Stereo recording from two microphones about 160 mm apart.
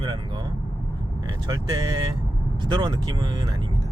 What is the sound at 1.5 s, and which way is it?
Speech, 25° right (ahead or behind).